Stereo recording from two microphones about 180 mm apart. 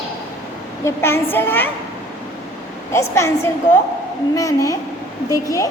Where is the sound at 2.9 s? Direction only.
15° left (ahead or behind).